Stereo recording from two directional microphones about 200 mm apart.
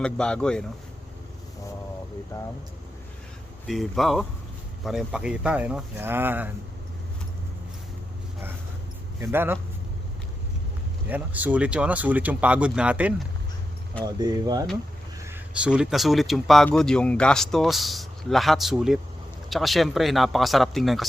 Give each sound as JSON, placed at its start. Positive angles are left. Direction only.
{"t": 0.0, "sound": "speech", "side_deg": 5}
{"t": 3.7, "sound": "speech", "side_deg": 0}
{"t": 9.2, "sound": "speech", "side_deg": -10}
{"t": 11.1, "sound": "speech", "side_deg": -10}
{"t": 14.0, "sound": "speech", "side_deg": -20}
{"t": 15.2, "sound": "speech", "side_deg": -10}